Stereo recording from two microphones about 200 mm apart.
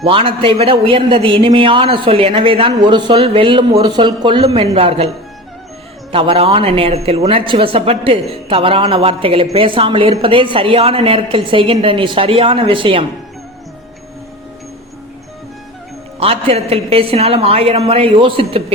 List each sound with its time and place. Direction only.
0.0 s a woman's voice: 30° right (ahead or behind)
6.1 s a woman's voice: 25° right (ahead or behind)
16.2 s a woman's voice: 30° right (ahead or behind)